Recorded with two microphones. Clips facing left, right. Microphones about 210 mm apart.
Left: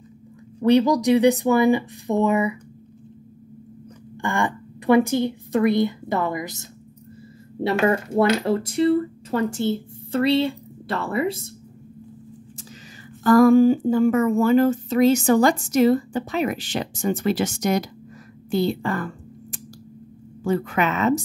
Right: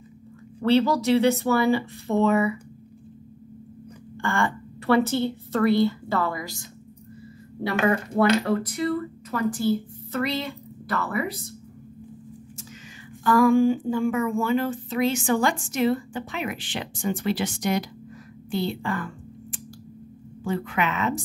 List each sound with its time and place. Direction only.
0.6 s speech: 15° left (ahead or behind)
4.2 s a woman's voice: 15° left (ahead or behind)
13.2 s speech: 40° left (ahead or behind)
18.5 s a sound: 40° left (ahead or behind)
20.4 s speech: 40° left (ahead or behind)